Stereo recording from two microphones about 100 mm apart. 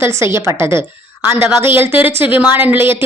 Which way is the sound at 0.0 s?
25° right (ahead or behind).